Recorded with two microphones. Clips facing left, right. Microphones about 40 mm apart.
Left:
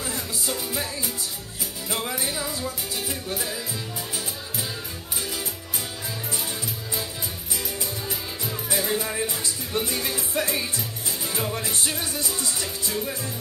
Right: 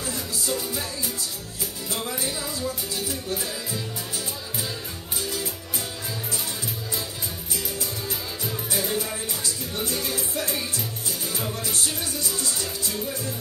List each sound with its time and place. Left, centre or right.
0.0 s music: centre
1.9 s music: left
8.7 s music: left